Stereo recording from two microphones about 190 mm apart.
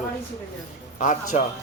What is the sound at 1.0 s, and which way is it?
Speech, 40° left (ahead or behind).